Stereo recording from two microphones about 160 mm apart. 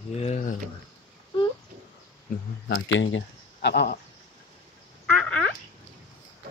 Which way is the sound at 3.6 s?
85° left.